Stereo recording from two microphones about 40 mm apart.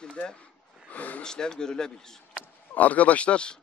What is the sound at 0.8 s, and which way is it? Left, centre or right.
Speech, left.